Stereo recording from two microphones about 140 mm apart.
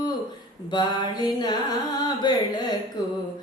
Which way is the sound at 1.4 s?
30° left (ahead or behind).